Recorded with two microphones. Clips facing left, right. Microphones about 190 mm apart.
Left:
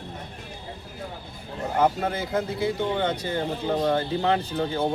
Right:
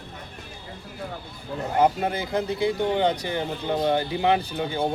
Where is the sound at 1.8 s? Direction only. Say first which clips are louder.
Right 1 dB; 30° right (ahead or behind).